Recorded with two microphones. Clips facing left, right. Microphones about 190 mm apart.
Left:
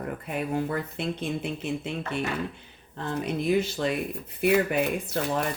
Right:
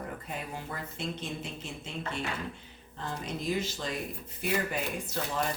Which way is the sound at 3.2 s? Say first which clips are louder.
Left 8 dB; 65° left (ahead or behind).